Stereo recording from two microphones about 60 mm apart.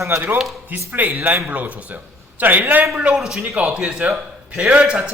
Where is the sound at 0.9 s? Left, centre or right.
Right.